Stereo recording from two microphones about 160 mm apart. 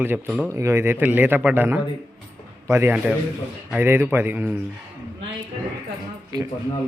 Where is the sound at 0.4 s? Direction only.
15° right (ahead or behind).